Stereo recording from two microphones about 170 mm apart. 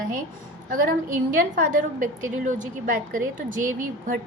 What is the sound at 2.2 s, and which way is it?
A woman's voice, 50° right (ahead or behind).